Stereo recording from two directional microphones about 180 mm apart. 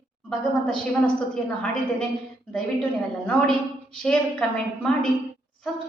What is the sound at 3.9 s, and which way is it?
A woman's voice, 5° left (ahead or behind).